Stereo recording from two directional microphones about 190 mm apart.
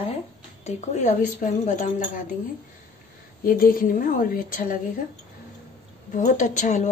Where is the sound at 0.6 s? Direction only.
40° left (ahead or behind).